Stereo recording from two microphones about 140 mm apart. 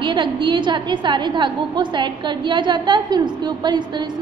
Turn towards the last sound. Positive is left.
turn(degrees=-35)  # may be behind; listen again after turning